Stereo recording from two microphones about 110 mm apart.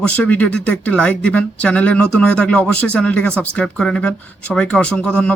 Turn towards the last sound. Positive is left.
turn(degrees=10)  # may be behind; listen again after turning